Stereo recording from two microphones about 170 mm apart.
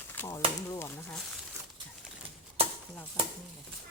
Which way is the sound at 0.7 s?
15° left (ahead or behind).